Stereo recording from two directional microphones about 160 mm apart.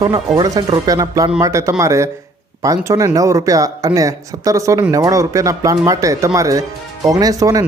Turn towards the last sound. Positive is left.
turn(degrees=-20)  # may be behind; listen again after turning